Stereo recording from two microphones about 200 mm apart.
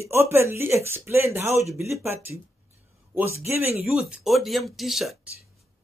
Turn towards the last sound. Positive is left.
turn(degrees=0)  # may be behind; listen again after turning